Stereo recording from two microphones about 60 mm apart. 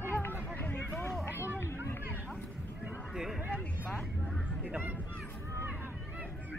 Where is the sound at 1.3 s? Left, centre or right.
Right.